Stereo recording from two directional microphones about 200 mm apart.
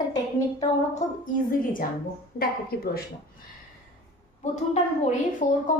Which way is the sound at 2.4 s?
50° left (ahead or behind).